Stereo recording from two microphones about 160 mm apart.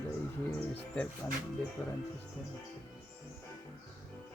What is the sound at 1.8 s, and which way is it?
Speech, 10° left (ahead or behind).